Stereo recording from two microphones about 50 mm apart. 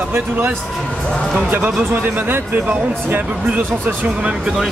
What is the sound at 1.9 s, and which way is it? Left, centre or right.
Speech, right.